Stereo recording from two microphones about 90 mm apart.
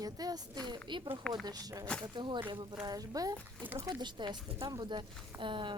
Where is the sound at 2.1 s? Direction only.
60° right (ahead or behind).